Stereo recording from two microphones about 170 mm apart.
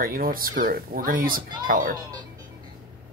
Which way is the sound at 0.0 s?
55° right (ahead or behind).